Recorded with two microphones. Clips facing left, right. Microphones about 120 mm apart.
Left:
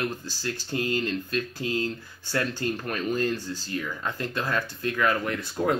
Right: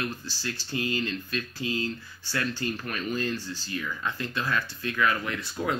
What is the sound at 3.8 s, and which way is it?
Speech, 35° left (ahead or behind).